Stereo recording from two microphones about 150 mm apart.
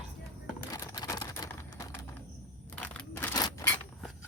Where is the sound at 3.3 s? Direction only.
25° left (ahead or behind).